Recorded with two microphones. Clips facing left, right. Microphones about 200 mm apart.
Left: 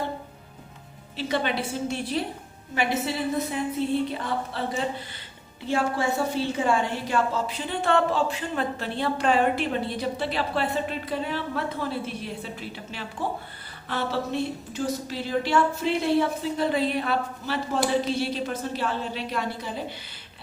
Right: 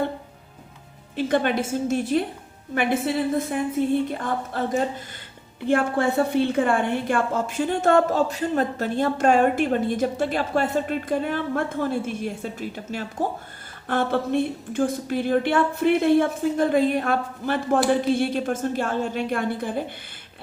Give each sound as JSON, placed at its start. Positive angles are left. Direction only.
{"t": 1.1, "sound": "a woman's voice", "side_deg": -50}